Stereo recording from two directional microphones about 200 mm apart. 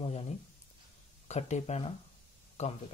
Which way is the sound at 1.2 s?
35° left (ahead or behind).